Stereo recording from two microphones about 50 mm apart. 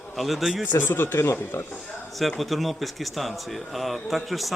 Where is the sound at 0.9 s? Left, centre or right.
Left.